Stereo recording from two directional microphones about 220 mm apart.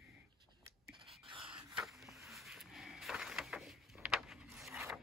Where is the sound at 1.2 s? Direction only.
20° right (ahead or behind).